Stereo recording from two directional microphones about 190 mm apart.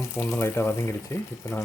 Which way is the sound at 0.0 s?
15° left (ahead or behind).